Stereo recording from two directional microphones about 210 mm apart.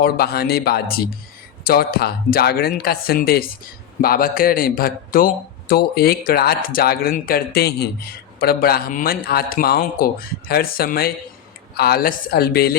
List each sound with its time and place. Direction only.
0.0 s a man's voice: 45° left (ahead or behind)